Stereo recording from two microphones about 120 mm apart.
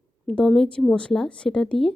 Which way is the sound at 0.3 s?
5° left (ahead or behind).